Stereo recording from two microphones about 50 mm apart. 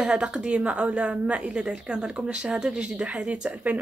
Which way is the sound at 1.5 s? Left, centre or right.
Centre.